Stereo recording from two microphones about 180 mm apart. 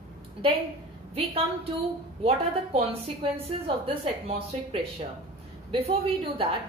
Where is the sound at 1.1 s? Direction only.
35° right (ahead or behind).